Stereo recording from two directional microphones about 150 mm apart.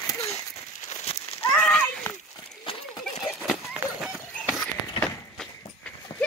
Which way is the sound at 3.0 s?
5° right (ahead or behind).